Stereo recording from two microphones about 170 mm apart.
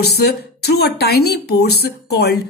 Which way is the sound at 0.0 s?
70° left (ahead or behind).